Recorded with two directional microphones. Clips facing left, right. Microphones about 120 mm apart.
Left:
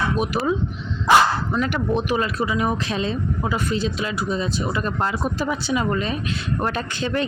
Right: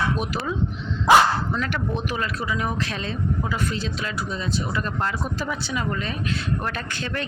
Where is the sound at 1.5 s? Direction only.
15° left (ahead or behind).